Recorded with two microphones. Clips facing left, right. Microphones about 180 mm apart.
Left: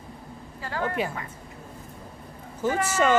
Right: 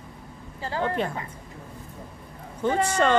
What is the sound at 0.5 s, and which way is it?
Speech, 25° right (ahead or behind).